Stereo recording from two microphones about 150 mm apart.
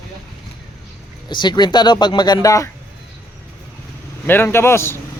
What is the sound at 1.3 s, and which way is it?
Speech, 30° left (ahead or behind).